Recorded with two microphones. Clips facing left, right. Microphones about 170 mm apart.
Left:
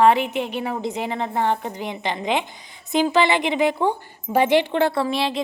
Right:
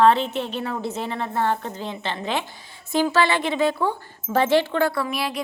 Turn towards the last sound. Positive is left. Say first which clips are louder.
# left 4 dB
turn(degrees=25)  # may be behind; listen again after turning